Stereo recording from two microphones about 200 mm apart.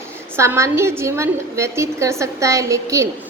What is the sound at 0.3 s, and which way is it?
A woman's voice, 15° right (ahead or behind).